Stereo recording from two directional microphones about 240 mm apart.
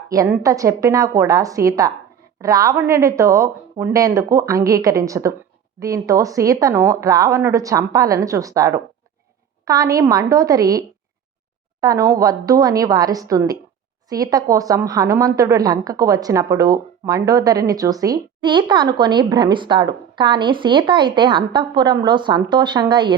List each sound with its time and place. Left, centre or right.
0.1 s a woman's voice: centre